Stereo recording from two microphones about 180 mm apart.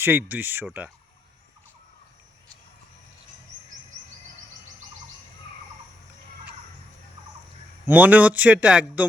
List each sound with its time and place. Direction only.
0.0 s a man's voice: 10° right (ahead or behind)
7.9 s a man's voice: 10° right (ahead or behind)